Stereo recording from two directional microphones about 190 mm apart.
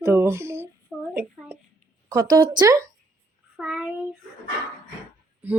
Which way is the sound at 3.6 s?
5° right (ahead or behind).